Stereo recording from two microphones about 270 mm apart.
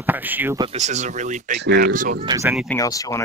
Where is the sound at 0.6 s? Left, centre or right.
Right.